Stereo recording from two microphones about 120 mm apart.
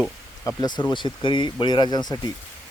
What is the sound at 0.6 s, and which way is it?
Speech, 35° left (ahead or behind).